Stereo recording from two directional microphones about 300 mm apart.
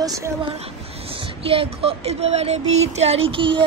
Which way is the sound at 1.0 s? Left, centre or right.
Centre.